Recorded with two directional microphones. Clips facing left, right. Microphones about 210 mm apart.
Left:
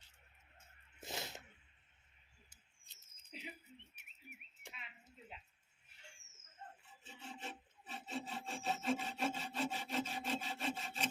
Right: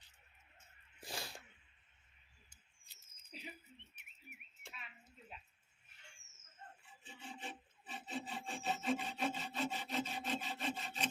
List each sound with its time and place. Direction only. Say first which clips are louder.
0.9 s sneeze: left 1 dB; 20° left (ahead or behind)
4.6 s a sound: right 1 dB; 20° left (ahead or behind)
7.3 s rub: even; 5° left (ahead or behind)